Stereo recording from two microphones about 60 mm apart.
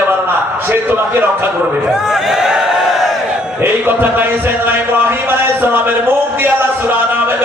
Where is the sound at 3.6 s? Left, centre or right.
Right.